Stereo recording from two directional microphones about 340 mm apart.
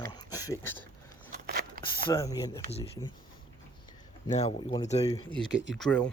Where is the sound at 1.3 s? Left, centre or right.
Right.